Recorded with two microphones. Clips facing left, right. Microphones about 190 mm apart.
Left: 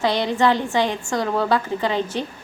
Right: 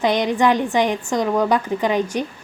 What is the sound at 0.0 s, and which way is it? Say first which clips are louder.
A woman's voice: right 2 dB; 20° right (ahead or behind).